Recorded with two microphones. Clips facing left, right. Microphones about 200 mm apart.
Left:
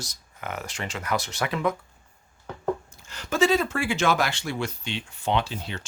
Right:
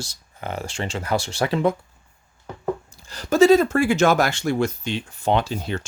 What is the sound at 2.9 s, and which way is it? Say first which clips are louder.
Speech: right 7 dB; 35° right (ahead or behind).